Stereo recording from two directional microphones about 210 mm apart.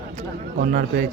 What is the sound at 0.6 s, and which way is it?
Speech, 45° right (ahead or behind).